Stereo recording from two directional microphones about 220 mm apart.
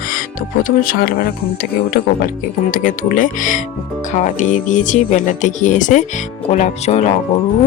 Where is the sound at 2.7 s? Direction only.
35° left (ahead or behind).